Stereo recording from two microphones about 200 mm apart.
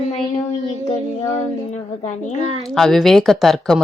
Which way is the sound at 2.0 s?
35° left (ahead or behind).